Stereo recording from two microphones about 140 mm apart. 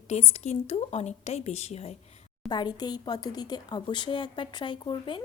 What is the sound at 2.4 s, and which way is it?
Speech, 30° left (ahead or behind).